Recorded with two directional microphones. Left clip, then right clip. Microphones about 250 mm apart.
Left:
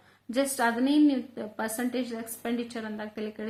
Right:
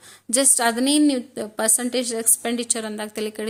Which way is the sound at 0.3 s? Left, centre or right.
Right.